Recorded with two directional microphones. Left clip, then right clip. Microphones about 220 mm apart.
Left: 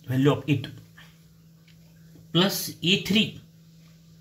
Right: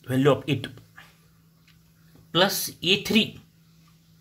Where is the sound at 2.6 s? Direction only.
50° right (ahead or behind).